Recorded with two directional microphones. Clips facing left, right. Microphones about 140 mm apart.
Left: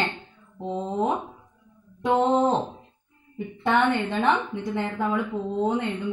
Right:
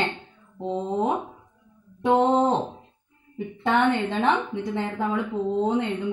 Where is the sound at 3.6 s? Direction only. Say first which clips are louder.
Even; 15° right (ahead or behind).